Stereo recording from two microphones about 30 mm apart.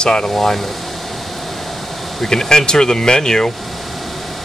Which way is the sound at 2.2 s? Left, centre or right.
Centre.